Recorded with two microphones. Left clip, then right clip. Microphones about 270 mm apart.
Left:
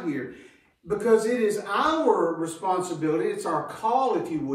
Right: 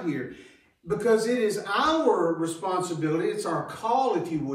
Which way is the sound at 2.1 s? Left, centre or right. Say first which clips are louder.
Left 1 dB; centre.